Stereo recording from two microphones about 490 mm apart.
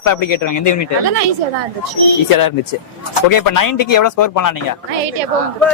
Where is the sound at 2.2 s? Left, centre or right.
Left.